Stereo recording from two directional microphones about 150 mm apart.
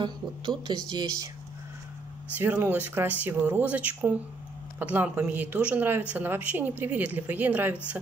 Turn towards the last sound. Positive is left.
turn(degrees=-10)  # may be behind; listen again after turning